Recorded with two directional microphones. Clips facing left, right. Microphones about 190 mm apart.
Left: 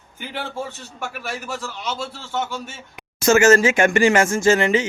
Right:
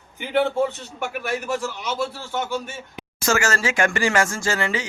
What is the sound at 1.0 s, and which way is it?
Speech, 20° right (ahead or behind).